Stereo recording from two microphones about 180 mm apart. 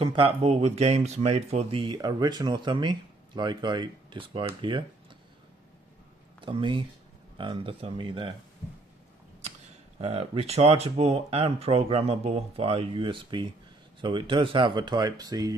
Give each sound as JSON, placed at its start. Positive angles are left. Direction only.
{"t": 0.0, "sound": "speech", "side_deg": -30}
{"t": 6.4, "sound": "speech", "side_deg": -30}
{"t": 9.9, "sound": "speech", "side_deg": -35}